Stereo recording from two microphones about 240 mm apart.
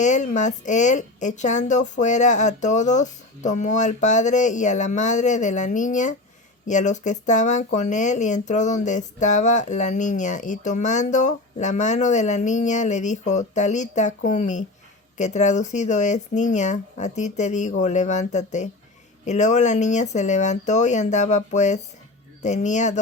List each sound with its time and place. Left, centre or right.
0.0 s speech: left